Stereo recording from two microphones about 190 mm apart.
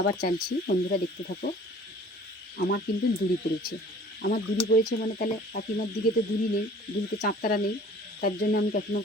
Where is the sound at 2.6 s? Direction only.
60° left (ahead or behind).